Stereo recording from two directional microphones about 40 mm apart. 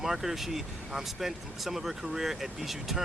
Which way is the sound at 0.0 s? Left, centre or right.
Centre.